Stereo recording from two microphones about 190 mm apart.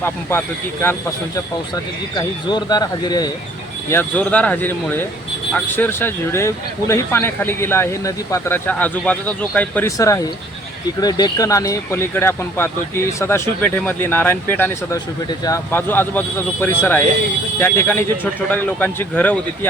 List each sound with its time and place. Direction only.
0.0 s speech: 10° left (ahead or behind)
2.1 s speech: 20° left (ahead or behind)